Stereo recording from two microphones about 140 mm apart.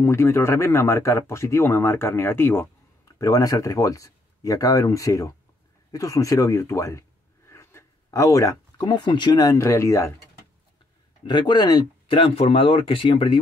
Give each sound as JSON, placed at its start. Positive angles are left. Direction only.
{"t": 0.0, "sound": "speech", "side_deg": 20}
{"t": 11.2, "sound": "speech", "side_deg": 30}